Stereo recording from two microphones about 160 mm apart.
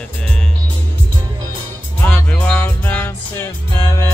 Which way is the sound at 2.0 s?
10° left (ahead or behind).